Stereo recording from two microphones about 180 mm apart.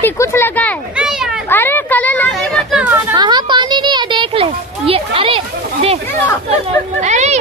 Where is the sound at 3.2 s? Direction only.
25° right (ahead or behind).